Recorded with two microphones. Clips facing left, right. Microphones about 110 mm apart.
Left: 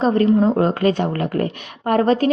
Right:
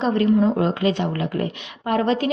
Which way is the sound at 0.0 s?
35° left (ahead or behind).